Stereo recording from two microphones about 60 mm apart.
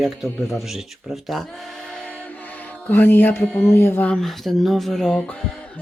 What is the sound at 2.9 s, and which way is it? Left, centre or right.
Music, left.